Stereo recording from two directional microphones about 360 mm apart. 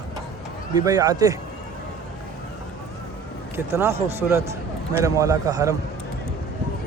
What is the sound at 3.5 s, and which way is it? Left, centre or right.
A man's voice, centre.